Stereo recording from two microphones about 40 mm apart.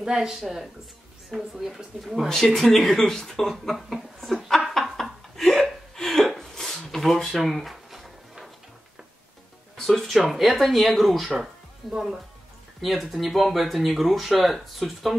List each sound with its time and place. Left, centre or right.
0.0 s speech: centre
1.3 s speech: centre
4.9 s laughter: centre
5.9 s gasp: centre
7.0 s drawer open or close: centre
9.8 s speech: centre
11.9 s speech: centre
12.8 s speech: centre